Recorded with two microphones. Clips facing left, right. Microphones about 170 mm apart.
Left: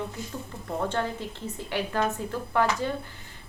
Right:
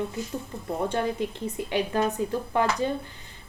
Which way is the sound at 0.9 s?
15° right (ahead or behind).